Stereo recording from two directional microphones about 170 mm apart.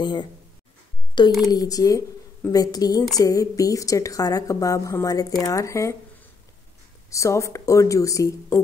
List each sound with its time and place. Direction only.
0.0 s a woman's voice: 25° left (ahead or behind)
7.1 s a woman's voice: 20° left (ahead or behind)